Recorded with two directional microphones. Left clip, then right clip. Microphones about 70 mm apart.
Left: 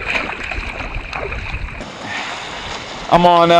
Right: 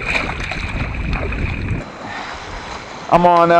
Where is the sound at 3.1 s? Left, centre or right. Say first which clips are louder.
Left 1 dB; centre.